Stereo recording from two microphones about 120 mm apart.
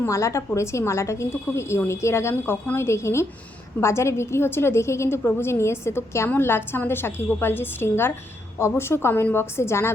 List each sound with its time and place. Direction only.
0.0 s a woman's voice: 25° left (ahead or behind)